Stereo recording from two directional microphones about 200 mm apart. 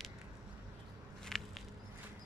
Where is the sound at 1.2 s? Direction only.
Centre (ahead or behind).